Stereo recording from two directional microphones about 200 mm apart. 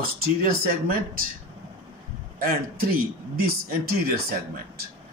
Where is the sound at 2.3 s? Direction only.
45° right (ahead or behind).